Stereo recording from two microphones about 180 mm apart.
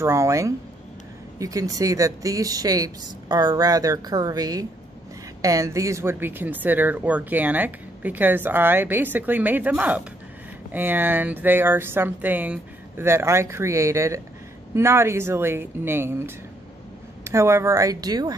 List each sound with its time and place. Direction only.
0.0 s speech: 15° right (ahead or behind)